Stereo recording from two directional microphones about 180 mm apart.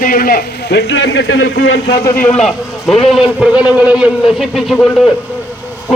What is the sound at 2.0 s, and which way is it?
Speech, 10° left (ahead or behind).